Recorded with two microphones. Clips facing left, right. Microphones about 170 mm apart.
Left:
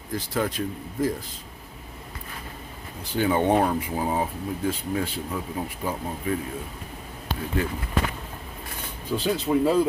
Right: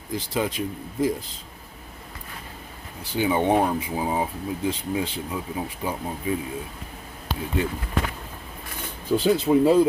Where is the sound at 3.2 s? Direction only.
10° right (ahead or behind).